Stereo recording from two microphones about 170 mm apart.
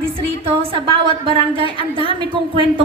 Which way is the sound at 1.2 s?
30° right (ahead or behind).